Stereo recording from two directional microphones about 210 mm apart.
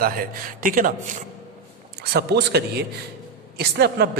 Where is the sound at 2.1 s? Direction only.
50° right (ahead or behind).